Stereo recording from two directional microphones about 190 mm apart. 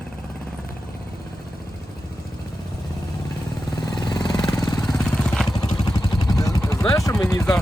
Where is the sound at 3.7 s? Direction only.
20° left (ahead or behind).